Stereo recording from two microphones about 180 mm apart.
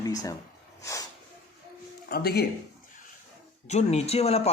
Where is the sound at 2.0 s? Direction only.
60° left (ahead or behind).